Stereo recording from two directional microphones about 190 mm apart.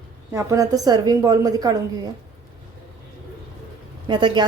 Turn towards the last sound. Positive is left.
turn(degrees=-25)  # may be behind; listen again after turning